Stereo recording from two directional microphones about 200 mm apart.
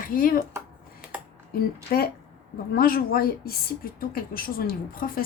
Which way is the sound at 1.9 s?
50° left (ahead or behind).